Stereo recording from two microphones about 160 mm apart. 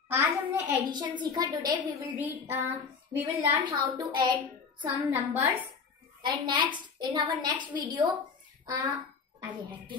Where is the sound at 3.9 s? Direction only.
25° right (ahead or behind).